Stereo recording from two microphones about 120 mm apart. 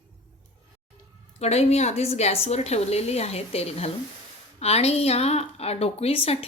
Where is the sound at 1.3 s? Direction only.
60° left (ahead or behind).